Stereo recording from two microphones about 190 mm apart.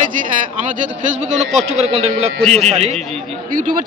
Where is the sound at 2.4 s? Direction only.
Centre (ahead or behind).